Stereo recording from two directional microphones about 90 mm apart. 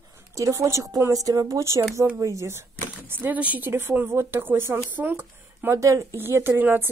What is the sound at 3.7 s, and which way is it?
Speech, 30° right (ahead or behind).